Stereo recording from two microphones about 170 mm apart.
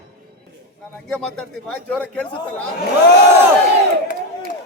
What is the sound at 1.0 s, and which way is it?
A man's voice, 5° left (ahead or behind).